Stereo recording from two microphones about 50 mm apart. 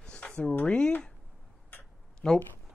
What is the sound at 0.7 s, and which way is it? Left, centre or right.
Speech, centre.